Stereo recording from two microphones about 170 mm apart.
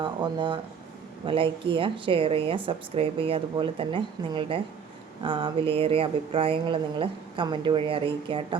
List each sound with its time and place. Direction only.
0.0 s speech: 30° right (ahead or behind)